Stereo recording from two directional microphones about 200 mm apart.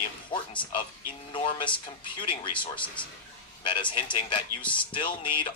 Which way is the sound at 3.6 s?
25° left (ahead or behind).